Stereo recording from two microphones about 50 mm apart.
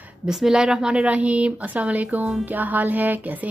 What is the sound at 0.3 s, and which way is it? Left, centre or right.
Speech, centre.